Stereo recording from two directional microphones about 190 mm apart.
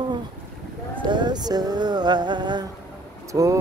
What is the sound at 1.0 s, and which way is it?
Music, 25° right (ahead or behind).